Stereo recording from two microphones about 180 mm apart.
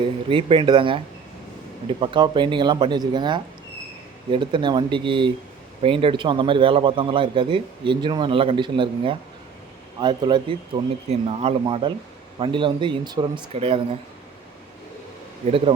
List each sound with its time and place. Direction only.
0.0 s a man's voice: 30° right (ahead or behind)
15.4 s speech: 30° right (ahead or behind)